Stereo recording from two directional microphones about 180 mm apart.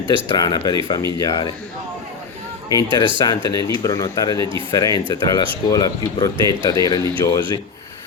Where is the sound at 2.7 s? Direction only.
25° right (ahead or behind).